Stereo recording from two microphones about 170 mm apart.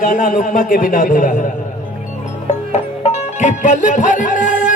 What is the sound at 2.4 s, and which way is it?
Music, 40° left (ahead or behind).